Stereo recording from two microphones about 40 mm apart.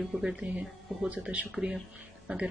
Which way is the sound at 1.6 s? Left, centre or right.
Centre.